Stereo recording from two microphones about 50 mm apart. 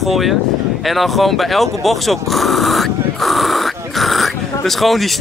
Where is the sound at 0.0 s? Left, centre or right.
Centre.